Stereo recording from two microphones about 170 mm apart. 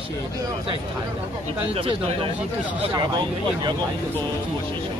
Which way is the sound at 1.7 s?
35° right (ahead or behind).